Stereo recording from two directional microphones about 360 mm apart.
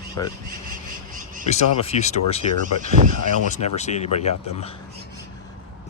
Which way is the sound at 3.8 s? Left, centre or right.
Centre.